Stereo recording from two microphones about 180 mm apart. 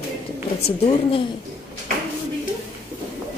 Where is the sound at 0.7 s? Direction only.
30° left (ahead or behind).